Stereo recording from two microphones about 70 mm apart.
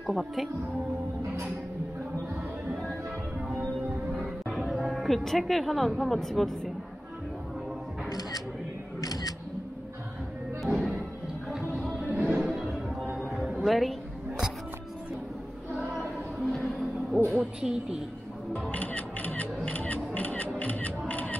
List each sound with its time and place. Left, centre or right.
0.0 s speech: centre
4.1 s music: centre
4.6 s speech: centre
9.0 s single-lens reflex camera: left
10.6 s music: centre
12.1 s music: right
12.4 s music: centre
17.3 s a sound: centre
18.5 s music: left